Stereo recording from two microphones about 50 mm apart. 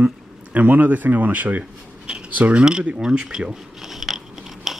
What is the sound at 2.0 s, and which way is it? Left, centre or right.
Speech, right.